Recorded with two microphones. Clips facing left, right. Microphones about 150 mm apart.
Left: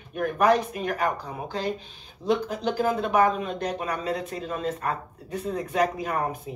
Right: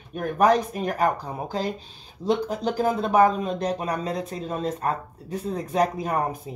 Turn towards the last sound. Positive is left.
turn(degrees=-35)  # may be behind; listen again after turning